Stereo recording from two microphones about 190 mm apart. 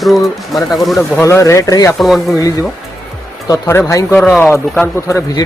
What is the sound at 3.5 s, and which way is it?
Speech, 15° left (ahead or behind).